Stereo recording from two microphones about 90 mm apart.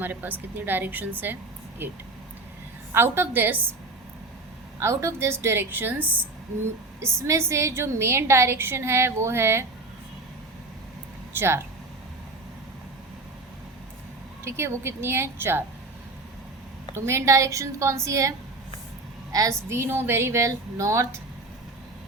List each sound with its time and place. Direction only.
0.0 s a woman's voice: 20° right (ahead or behind)
4.8 s a woman's voice: 30° right (ahead or behind)
7.2 s a woman's voice: 30° right (ahead or behind)
11.3 s a woman's voice: 30° right (ahead or behind)
14.4 s a woman's voice: 30° right (ahead or behind)
16.9 s a woman's voice: 30° right (ahead or behind)